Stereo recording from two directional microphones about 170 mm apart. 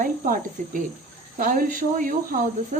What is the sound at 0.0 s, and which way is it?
Speech, 55° right (ahead or behind).